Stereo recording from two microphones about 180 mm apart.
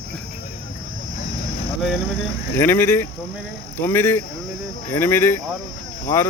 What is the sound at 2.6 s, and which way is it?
Speech, 10° left (ahead or behind).